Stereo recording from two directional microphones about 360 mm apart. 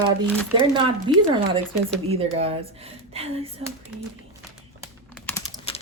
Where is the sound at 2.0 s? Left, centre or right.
Centre.